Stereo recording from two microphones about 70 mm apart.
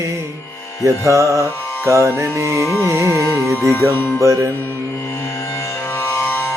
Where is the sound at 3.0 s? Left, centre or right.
Left.